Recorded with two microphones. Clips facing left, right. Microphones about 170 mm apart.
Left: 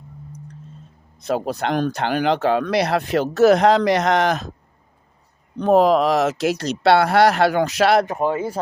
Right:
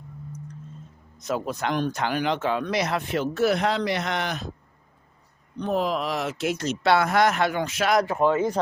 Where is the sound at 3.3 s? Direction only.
90° left.